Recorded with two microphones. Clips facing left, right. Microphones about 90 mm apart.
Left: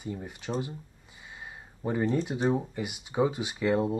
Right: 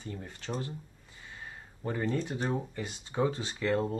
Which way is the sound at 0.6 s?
15° left (ahead or behind).